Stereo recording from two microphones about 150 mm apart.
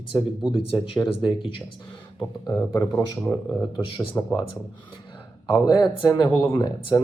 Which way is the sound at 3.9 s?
20° left (ahead or behind).